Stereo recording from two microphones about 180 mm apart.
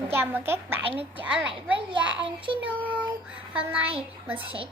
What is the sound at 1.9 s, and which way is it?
Speech, 25° right (ahead or behind).